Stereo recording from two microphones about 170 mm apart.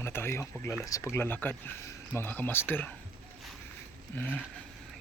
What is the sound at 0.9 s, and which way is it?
Speech, 20° left (ahead or behind).